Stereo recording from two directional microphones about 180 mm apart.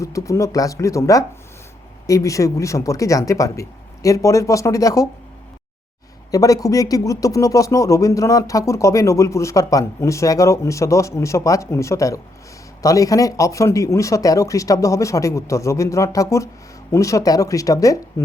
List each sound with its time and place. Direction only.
0.0 s speech: 15° left (ahead or behind)
6.3 s speech: 20° left (ahead or behind)